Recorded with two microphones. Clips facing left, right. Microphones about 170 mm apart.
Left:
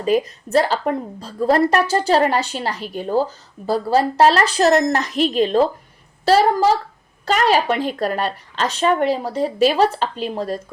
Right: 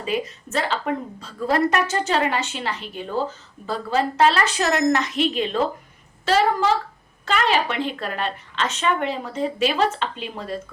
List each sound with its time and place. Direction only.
0.0 s a woman's voice: 40° left (ahead or behind)